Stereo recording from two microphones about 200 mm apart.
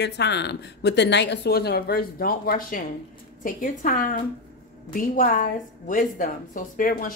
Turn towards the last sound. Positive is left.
turn(degrees=45)  # may be behind; listen again after turning